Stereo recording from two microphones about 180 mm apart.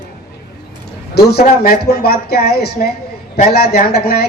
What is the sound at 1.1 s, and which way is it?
A woman's voice, 60° left (ahead or behind).